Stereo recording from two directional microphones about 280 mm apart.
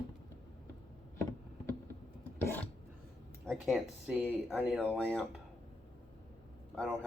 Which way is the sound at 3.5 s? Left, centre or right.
Centre.